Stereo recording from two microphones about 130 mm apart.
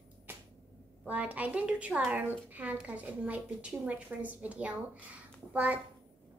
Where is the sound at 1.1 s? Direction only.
10° right (ahead or behind).